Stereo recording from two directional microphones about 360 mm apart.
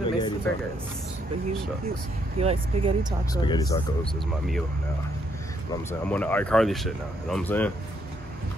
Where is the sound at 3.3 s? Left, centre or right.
Centre.